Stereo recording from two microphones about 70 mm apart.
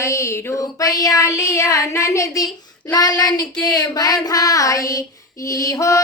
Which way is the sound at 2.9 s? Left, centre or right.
Left.